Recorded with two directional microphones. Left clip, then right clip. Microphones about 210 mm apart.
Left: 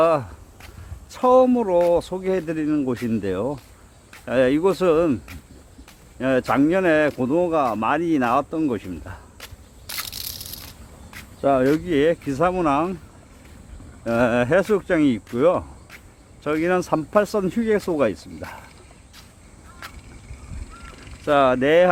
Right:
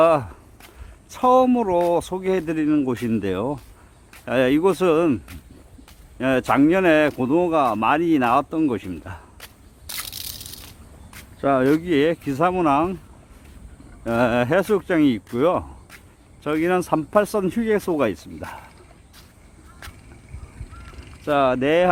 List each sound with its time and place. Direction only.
0.0 s a sound: 15° right (ahead or behind)
1.1 s speech: 15° right (ahead or behind)
9.8 s crushing: centre (ahead or behind)
11.1 s speech: 10° right (ahead or behind)
14.0 s speech: 10° right (ahead or behind)
19.8 s fowl: centre (ahead or behind)
21.2 s speech: 5° right (ahead or behind)